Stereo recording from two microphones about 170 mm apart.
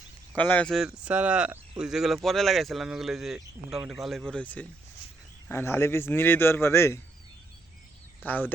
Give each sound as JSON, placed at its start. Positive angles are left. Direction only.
{"t": 0.3, "sound": "a man's voice", "side_deg": 10}
{"t": 8.3, "sound": "speech", "side_deg": 10}